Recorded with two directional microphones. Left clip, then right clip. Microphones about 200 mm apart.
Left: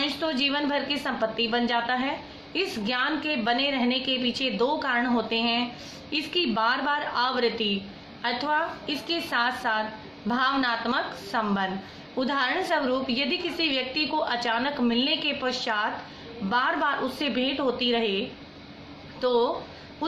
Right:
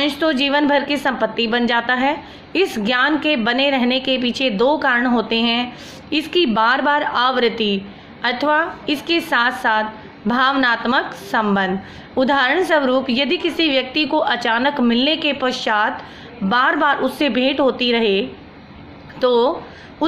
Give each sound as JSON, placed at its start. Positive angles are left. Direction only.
{"t": 0.0, "sound": "a woman's voice", "side_deg": -45}